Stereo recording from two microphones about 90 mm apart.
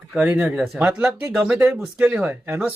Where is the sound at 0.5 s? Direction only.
Centre (ahead or behind).